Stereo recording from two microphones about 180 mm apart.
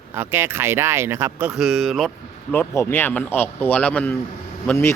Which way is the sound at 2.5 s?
15° left (ahead or behind).